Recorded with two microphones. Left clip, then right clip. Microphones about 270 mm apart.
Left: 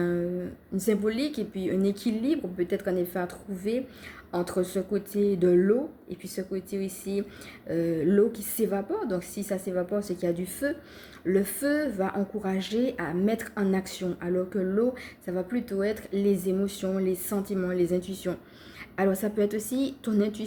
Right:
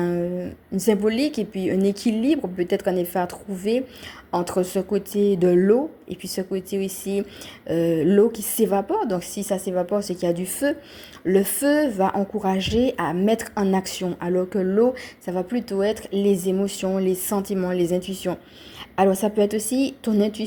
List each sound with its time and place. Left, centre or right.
0.8 s a woman's voice: right